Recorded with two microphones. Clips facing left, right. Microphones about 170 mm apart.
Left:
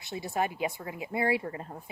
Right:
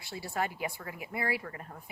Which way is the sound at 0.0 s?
20° left (ahead or behind).